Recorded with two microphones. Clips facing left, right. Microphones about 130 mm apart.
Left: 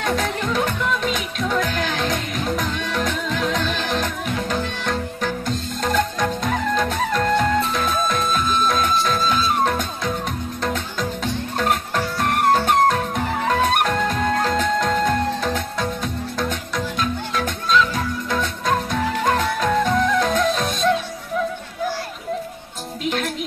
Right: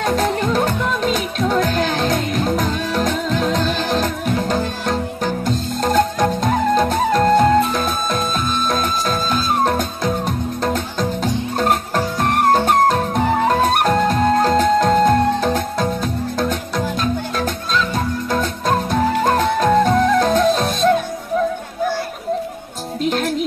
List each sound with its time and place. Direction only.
0.0 s music: 40° right (ahead or behind)
23.0 s music: 35° right (ahead or behind)